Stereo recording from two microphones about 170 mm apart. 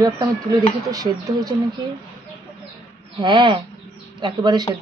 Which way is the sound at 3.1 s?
30° right (ahead or behind).